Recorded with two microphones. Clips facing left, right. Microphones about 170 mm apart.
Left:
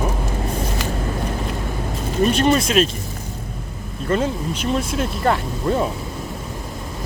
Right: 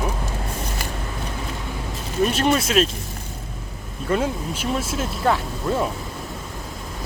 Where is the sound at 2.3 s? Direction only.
5° right (ahead or behind).